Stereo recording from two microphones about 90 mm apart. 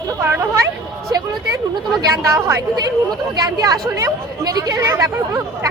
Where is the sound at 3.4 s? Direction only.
45° right (ahead or behind).